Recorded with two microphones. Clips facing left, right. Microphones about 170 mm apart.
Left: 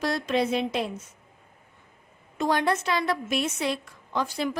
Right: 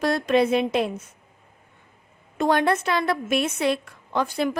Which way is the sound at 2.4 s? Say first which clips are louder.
Right 4 dB; 55° right (ahead or behind).